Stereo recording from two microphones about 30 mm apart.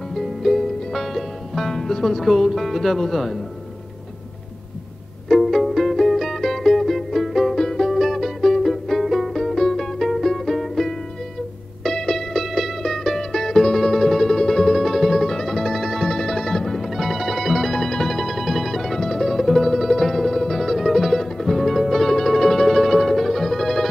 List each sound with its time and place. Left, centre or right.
0.1 s music: centre
1.7 s speech: centre
5.3 s music: centre
7.5 s music: centre
7.8 s music: centre
11.9 s music: centre
12.3 s music: centre
12.8 s music: centre
14.3 s music: centre
14.7 s music: centre
17.8 s music: centre
18.1 s music: centre
18.8 s music: centre